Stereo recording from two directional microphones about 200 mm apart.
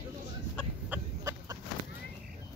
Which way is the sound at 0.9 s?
15° right (ahead or behind).